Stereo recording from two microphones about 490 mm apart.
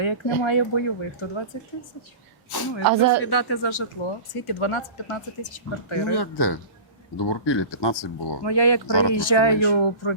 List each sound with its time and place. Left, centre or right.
0.0 s speech: left
2.5 s speech: left
2.8 s speech: right
3.2 s speech: left
4.4 s speech: left